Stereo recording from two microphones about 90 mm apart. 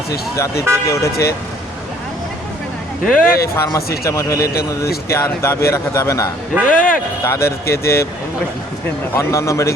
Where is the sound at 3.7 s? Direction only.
35° left (ahead or behind).